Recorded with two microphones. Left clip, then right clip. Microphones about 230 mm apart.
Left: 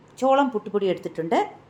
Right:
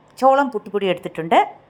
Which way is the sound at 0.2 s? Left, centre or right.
Right.